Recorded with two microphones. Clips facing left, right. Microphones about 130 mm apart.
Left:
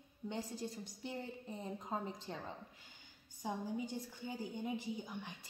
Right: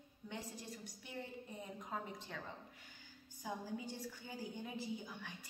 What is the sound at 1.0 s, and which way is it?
A woman's voice, 30° left (ahead or behind).